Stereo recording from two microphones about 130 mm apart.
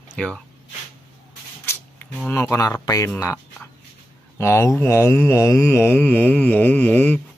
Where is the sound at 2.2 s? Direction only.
20° left (ahead or behind).